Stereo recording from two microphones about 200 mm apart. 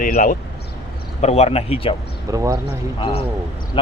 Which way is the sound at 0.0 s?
40° left (ahead or behind).